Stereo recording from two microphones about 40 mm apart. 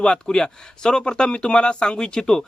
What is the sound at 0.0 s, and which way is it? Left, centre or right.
Speech, left.